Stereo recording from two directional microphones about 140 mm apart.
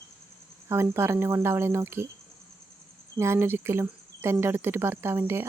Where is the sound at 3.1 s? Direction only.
20° right (ahead or behind).